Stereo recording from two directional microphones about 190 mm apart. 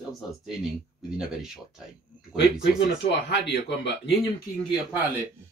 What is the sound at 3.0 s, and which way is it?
Speech, 60° left (ahead or behind).